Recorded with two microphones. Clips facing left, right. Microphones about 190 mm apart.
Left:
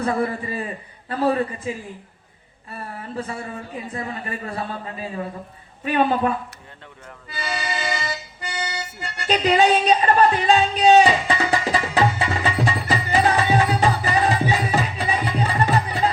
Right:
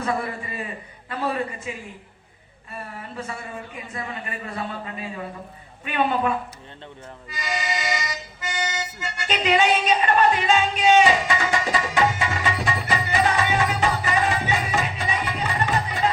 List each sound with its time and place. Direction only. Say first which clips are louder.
0.0 s speech: left 4 dB; 35° left (ahead or behind)
7.3 s music: even; 35° left (ahead or behind)